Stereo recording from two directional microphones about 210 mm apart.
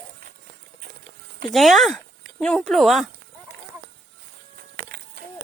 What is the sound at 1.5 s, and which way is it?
Speech, centre (ahead or behind).